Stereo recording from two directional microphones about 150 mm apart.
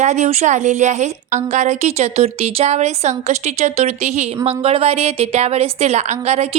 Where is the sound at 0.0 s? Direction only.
50° right (ahead or behind).